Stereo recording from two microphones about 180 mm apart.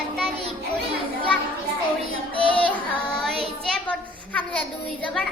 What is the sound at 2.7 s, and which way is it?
A child's voice, 5° left (ahead or behind).